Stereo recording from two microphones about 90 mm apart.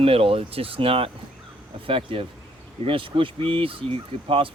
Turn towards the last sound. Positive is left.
turn(degrees=-80)